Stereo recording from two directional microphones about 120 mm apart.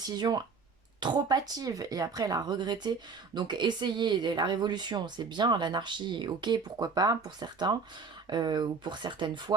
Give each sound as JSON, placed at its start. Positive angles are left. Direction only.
{"t": 0.2, "sound": "speech", "side_deg": -35}